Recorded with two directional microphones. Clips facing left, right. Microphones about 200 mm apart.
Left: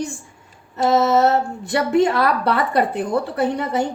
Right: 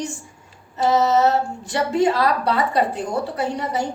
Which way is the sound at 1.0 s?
60° left (ahead or behind).